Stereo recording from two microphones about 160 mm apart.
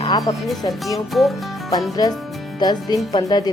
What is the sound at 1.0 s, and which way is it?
Speech, centre (ahead or behind).